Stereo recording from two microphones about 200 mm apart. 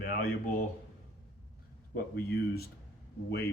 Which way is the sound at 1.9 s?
50° left (ahead or behind).